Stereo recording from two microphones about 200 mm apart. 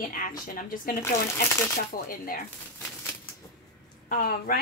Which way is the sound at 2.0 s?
45° left (ahead or behind).